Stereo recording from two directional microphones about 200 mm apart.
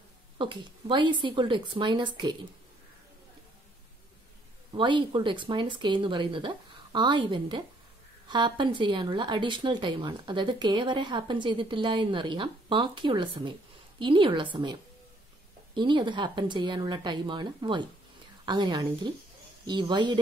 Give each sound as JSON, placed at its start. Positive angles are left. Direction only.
{"t": 0.4, "sound": "speech", "side_deg": -25}
{"t": 4.7, "sound": "speech", "side_deg": -25}